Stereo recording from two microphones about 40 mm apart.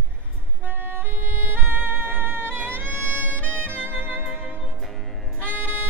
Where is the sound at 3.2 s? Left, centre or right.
Left.